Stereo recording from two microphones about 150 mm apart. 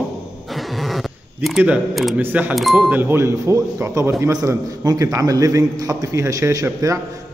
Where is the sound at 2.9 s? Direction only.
15° right (ahead or behind).